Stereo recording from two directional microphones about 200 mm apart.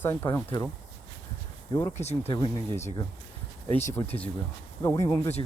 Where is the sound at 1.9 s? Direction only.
30° left (ahead or behind).